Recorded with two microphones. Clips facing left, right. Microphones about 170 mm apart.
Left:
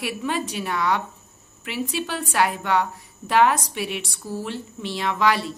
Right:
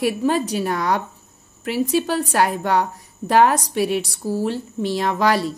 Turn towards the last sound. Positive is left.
turn(degrees=-40)  # may be behind; listen again after turning